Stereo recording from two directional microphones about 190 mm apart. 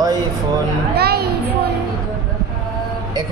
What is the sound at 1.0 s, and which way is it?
Music, 55° right (ahead or behind).